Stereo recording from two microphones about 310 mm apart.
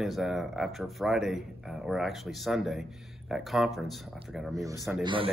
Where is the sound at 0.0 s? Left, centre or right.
Centre.